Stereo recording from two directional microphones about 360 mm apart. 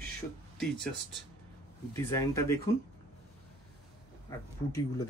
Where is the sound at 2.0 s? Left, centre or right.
Centre.